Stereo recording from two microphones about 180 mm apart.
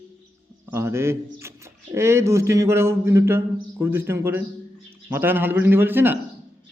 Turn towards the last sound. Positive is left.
turn(degrees=-10)  # may be behind; listen again after turning